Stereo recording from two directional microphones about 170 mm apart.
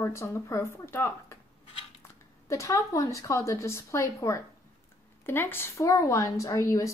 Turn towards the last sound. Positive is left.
turn(degrees=20)  # may be behind; listen again after turning